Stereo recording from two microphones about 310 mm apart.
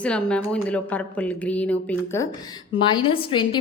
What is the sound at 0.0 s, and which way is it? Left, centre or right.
Speech, centre.